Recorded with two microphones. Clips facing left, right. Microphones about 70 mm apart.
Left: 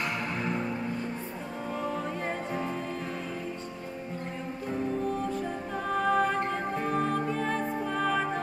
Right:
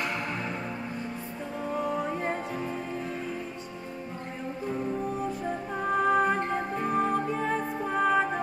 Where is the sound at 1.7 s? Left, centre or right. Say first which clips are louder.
Right 3 dB; centre.